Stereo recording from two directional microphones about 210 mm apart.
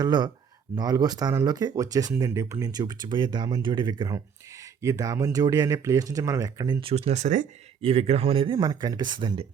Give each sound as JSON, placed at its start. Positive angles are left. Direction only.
{"t": 0.0, "sound": "speech", "side_deg": -20}